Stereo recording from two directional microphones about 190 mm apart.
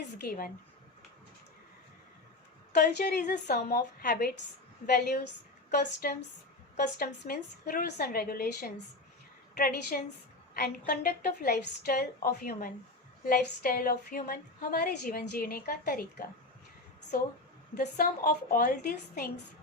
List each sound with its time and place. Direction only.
0.2 s a woman's voice: 50° left (ahead or behind)
2.7 s a woman's voice: 55° left (ahead or behind)
4.9 s a woman's voice: 55° left (ahead or behind)
17.7 s a woman's voice: 45° left (ahead or behind)